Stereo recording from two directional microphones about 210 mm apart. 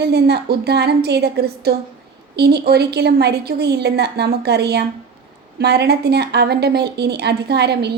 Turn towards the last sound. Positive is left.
turn(degrees=-50)  # may be behind; listen again after turning